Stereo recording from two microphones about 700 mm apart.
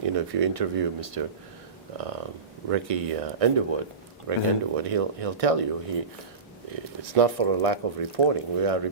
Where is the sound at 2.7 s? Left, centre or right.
Right.